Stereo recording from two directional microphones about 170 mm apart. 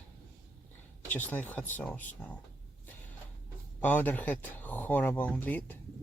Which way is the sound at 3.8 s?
10° left (ahead or behind).